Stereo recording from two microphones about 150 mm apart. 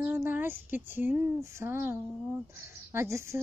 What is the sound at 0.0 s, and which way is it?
Speech, 15° right (ahead or behind).